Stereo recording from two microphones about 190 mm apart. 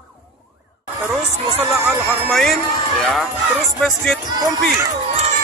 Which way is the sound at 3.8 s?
Centre (ahead or behind).